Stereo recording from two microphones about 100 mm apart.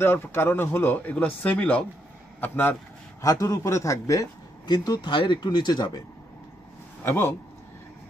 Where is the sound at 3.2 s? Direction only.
35° left (ahead or behind).